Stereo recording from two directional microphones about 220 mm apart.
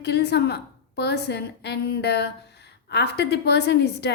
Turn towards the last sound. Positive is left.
turn(degrees=50)  # may be behind; listen again after turning